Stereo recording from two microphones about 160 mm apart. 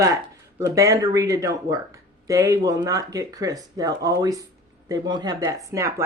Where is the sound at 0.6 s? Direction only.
20° right (ahead or behind).